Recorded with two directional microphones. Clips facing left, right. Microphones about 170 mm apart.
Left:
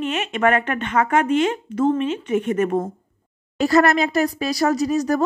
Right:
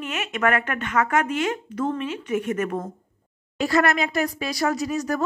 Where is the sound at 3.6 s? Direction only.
40° left (ahead or behind).